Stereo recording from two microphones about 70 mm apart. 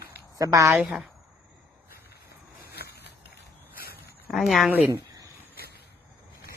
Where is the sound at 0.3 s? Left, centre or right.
Right.